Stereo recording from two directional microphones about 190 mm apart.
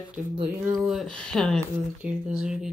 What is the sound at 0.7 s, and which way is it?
Speech, centre (ahead or behind).